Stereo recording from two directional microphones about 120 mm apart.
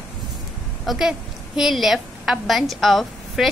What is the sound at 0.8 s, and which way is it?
A woman's voice, 5° right (ahead or behind).